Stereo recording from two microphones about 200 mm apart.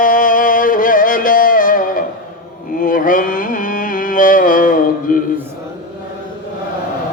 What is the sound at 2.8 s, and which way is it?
Music, 45° left (ahead or behind).